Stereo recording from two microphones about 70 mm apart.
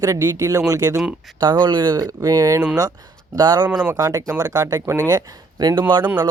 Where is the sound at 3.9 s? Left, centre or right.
Right.